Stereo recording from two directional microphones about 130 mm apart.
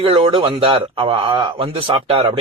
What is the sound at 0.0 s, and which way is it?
Speech, 45° right (ahead or behind).